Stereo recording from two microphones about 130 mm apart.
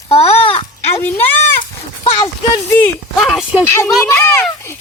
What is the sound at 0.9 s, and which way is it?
Speech, 15° left (ahead or behind).